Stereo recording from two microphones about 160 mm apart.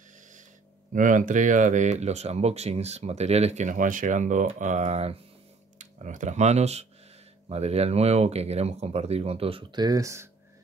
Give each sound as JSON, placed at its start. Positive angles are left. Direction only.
{"t": 0.9, "sound": "speech", "side_deg": -55}